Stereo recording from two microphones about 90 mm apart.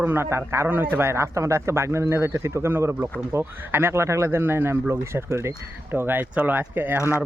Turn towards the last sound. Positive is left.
turn(degrees=-25)  # may be behind; listen again after turning